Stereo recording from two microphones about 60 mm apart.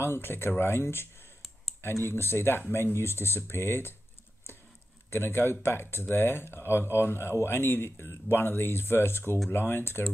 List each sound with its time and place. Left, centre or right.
0.0 s speech: left
2.0 s speech: left
5.1 s speech: left